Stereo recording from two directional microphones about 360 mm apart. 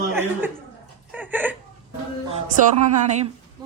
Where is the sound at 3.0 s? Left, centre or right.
Centre.